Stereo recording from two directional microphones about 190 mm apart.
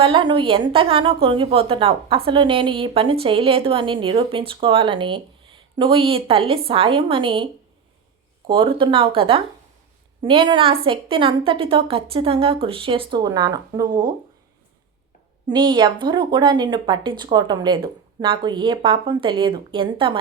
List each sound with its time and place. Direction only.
0.0 s a woman's voice: 25° right (ahead or behind)
8.4 s a woman's voice: 25° right (ahead or behind)
15.4 s a woman's voice: 25° right (ahead or behind)